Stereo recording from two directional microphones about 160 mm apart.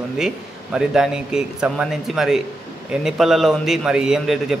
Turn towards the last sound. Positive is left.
turn(degrees=-5)  # may be behind; listen again after turning